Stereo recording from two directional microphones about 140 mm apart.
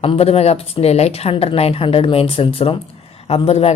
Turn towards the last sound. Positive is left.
turn(degrees=50)  # may be behind; listen again after turning